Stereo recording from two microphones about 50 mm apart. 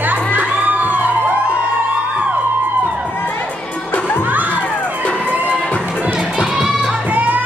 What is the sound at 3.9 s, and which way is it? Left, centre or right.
Crowd, left.